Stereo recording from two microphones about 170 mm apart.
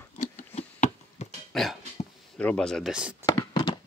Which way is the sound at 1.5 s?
Centre (ahead or behind).